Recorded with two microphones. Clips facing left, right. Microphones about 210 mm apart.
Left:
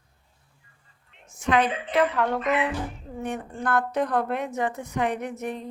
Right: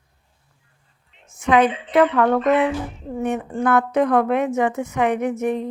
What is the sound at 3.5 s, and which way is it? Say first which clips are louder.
Speech: right 6 dB; 90° right.